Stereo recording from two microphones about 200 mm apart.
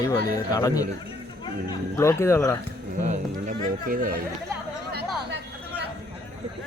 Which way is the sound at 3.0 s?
40° right (ahead or behind).